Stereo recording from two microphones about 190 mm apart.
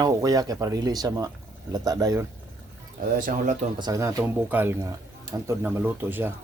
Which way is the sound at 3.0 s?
45° right (ahead or behind).